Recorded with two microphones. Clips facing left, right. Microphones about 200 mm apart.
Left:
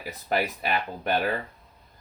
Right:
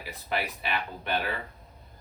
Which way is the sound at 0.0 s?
45° left (ahead or behind).